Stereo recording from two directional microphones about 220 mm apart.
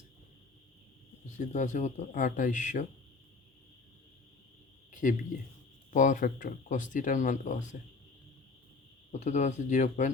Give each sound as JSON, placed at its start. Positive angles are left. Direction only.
{"t": 1.4, "sound": "speech", "side_deg": 35}
{"t": 4.9, "sound": "a sound", "side_deg": 35}
{"t": 5.9, "sound": "speech", "side_deg": 35}
{"t": 9.1, "sound": "speech", "side_deg": 30}